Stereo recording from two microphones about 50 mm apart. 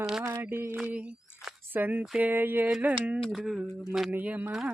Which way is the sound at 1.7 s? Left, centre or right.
Right.